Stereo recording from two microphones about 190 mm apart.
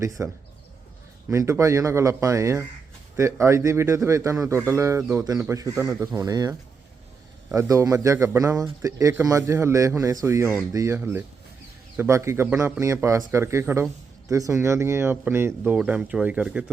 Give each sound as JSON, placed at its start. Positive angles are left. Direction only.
{"t": 0.2, "sound": "speech", "side_deg": -10}